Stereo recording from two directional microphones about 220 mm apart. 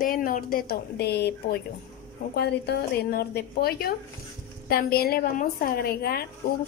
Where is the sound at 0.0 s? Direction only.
40° left (ahead or behind).